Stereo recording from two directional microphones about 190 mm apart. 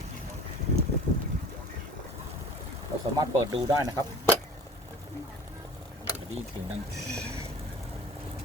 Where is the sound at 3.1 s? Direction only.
20° right (ahead or behind).